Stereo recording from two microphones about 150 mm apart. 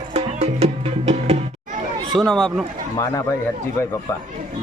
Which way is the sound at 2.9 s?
20° left (ahead or behind).